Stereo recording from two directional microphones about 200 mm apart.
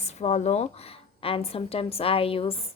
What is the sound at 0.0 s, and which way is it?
Speech, 35° left (ahead or behind).